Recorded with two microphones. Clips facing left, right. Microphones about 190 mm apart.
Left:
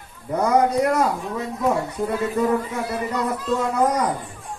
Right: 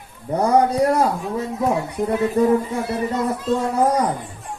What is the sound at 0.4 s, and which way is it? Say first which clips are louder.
Speech: right 2 dB; 30° right (ahead or behind).